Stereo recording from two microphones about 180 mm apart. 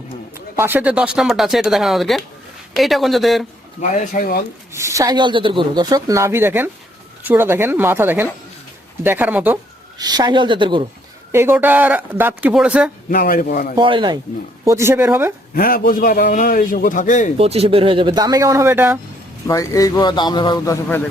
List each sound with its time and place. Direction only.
0.5 s speech: 10° right (ahead or behind)
3.8 s a man's voice: 45° left (ahead or behind)
4.7 s speech: 15° right (ahead or behind)
10.0 s speech: 20° right (ahead or behind)
11.3 s speech: 15° right (ahead or behind)
13.1 s a man's voice: 55° left (ahead or behind)
13.7 s speech: 25° right (ahead or behind)
14.6 s speech: 15° right (ahead or behind)
15.5 s a man's voice: 55° left (ahead or behind)
17.3 s speech: 35° right (ahead or behind); by 18.9 s 10° right (ahead or behind)
19.5 s a man's voice: 20° left (ahead or behind)